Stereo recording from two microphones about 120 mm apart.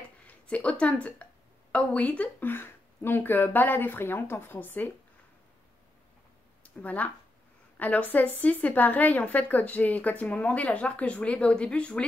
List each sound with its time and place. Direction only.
0.3 s a woman's voice: 10° left (ahead or behind)
6.6 s a woman's voice: 15° left (ahead or behind)